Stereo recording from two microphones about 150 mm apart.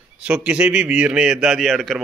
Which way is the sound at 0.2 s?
5° right (ahead or behind).